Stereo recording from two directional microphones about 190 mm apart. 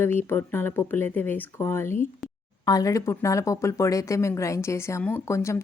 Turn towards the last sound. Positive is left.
turn(degrees=15)  # may be behind; listen again after turning